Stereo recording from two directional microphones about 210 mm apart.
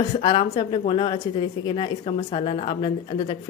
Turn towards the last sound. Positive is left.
turn(degrees=25)  # may be behind; listen again after turning